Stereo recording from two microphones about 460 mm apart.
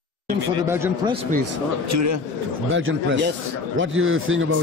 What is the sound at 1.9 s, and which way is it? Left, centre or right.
Speech, right.